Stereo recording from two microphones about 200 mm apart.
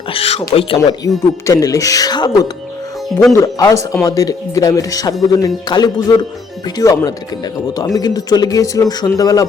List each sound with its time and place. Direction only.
0.1 s speech: 30° left (ahead or behind)